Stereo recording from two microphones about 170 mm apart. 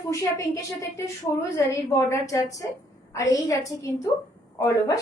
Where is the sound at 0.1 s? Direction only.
20° left (ahead or behind).